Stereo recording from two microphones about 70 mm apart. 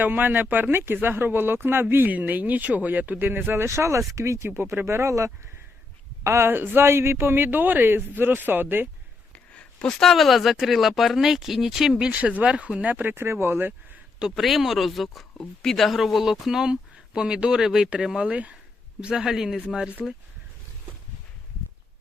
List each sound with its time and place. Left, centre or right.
0.0 s speech: right
4.5 s a woman's voice: right
6.5 s speech: right
9.3 s a sound: centre
9.8 s speech: centre; by 13.7 s right
14.2 s speech: centre
19.0 s speech: centre